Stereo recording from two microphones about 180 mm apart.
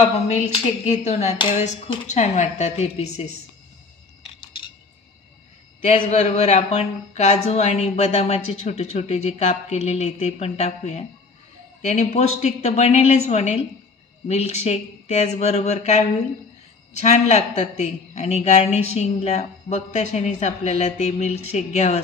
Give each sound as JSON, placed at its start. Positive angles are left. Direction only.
{"t": 0.0, "sound": "speech", "side_deg": 40}
{"t": 5.9, "sound": "speech", "side_deg": 40}